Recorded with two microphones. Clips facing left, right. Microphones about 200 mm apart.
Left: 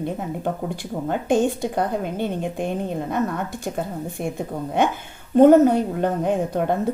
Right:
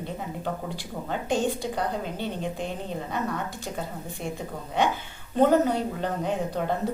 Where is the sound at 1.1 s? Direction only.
50° left (ahead or behind).